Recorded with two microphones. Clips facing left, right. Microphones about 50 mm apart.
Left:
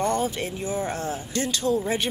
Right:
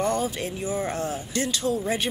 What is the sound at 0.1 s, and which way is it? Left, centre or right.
Speech, left.